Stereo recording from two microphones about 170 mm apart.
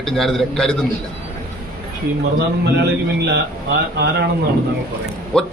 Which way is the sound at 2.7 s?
85° right.